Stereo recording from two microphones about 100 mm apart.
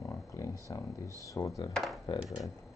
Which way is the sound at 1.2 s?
35° left (ahead or behind).